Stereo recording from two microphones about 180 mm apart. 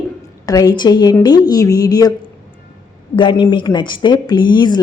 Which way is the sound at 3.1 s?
30° left (ahead or behind).